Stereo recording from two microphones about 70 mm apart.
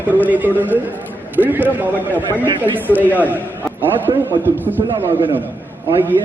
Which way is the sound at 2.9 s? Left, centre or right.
Left.